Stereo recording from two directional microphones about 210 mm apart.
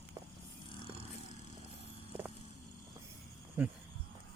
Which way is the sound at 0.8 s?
25° left (ahead or behind).